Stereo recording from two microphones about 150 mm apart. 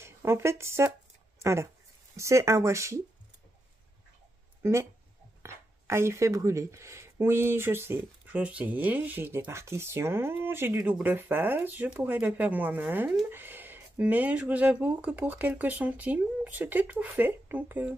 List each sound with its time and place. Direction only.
0.0 s speech: 15° right (ahead or behind)
4.6 s speech: 15° right (ahead or behind)